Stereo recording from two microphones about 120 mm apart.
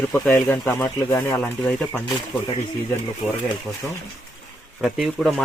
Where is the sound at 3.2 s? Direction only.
5° right (ahead or behind).